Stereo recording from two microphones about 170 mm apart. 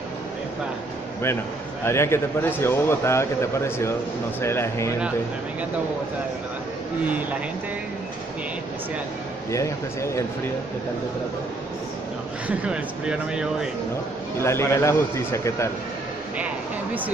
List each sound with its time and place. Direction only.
1.9 s a man's voice: 15° left (ahead or behind)
9.5 s a man's voice: 15° left (ahead or behind)
12.4 s speech: 5° right (ahead or behind)
14.4 s a man's voice: 15° left (ahead or behind)